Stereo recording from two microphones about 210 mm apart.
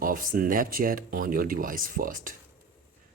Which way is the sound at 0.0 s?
40° right (ahead or behind).